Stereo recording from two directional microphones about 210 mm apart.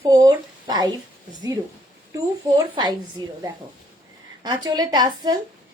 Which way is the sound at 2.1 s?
20° right (ahead or behind).